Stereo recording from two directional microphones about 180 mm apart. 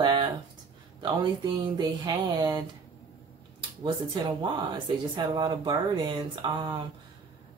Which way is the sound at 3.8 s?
25° right (ahead or behind).